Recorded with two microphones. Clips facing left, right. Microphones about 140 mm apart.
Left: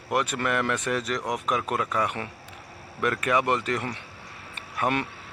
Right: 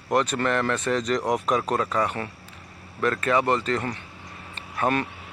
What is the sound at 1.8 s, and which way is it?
Speech, 10° left (ahead or behind).